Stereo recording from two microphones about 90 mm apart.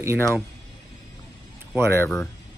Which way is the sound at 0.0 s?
30° right (ahead or behind).